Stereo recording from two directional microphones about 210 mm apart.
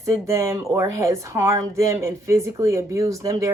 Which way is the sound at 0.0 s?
15° right (ahead or behind).